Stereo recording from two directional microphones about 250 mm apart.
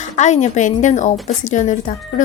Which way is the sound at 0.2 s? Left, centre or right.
Left.